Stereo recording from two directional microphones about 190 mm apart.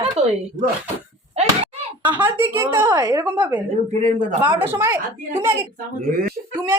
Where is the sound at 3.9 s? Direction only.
35° right (ahead or behind).